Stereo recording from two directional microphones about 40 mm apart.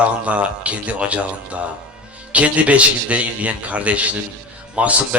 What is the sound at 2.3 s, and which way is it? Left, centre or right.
Speech, right.